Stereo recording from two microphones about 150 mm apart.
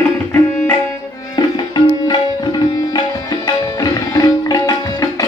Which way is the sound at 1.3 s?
30° left (ahead or behind).